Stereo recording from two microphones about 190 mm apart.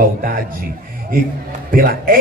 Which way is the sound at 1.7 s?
50° right (ahead or behind).